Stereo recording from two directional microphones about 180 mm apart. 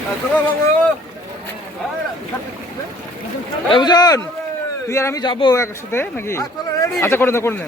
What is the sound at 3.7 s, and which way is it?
Speech, 25° left (ahead or behind).